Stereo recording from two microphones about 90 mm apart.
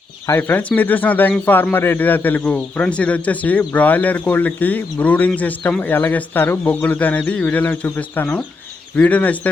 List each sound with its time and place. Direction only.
0.3 s speech: 25° left (ahead or behind)